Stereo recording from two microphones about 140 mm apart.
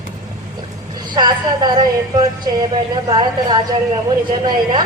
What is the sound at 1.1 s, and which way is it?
A woman's voice, 30° right (ahead or behind).